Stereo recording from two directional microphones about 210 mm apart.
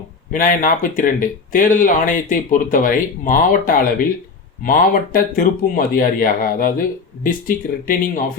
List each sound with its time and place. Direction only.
0.3 s speech: 40° left (ahead or behind)